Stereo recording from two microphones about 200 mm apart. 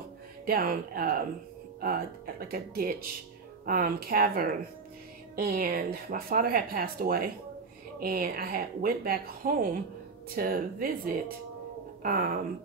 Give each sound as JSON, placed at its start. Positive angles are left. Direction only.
{"t": 0.5, "sound": "a woman's voice", "side_deg": -45}